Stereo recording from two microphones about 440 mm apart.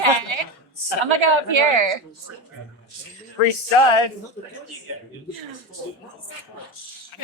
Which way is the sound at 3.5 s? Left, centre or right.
Left.